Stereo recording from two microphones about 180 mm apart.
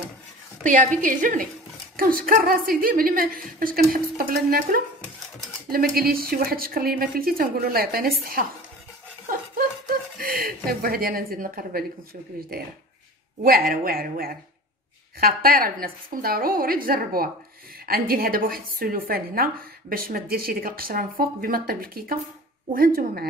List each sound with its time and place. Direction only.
0.7 s a woman's voice: 50° right (ahead or behind)
9.3 s chuckle: 50° right (ahead or behind)
12.4 s a woman's voice: 55° right (ahead or behind)
13.7 s a woman's voice: 55° right (ahead or behind)